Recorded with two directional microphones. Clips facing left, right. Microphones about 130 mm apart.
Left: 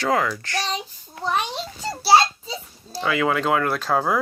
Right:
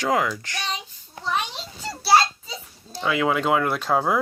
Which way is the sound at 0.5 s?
35° left (ahead or behind).